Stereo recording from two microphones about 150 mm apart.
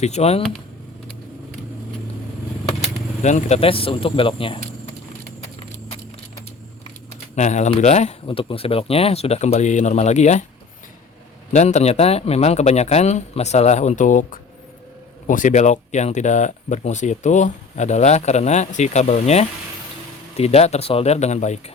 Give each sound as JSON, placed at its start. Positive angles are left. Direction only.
{"t": 0.0, "sound": "speech", "side_deg": 45}
{"t": 3.2, "sound": "speech", "side_deg": 50}
{"t": 7.3, "sound": "speech", "side_deg": 50}
{"t": 8.3, "sound": "speech", "side_deg": 35}
{"t": 11.5, "sound": "speech", "side_deg": 50}